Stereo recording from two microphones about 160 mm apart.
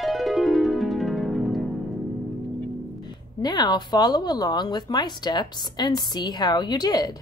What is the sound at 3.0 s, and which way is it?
Speech, 25° left (ahead or behind).